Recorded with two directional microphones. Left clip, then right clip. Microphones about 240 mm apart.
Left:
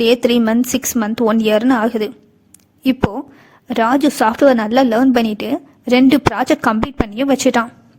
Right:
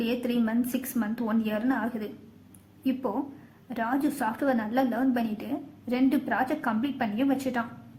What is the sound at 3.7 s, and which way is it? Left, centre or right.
A woman's voice, left.